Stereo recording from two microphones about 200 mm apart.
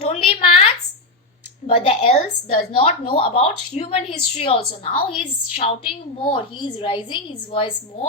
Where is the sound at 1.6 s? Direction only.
30° left (ahead or behind).